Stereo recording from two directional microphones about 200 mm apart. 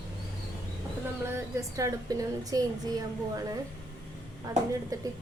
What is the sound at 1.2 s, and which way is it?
A woman's voice, 15° right (ahead or behind).